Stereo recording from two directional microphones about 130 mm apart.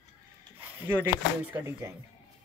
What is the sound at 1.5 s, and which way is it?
Speech, 20° right (ahead or behind).